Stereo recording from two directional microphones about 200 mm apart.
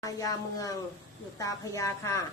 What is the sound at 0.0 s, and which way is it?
A woman's voice, 15° left (ahead or behind).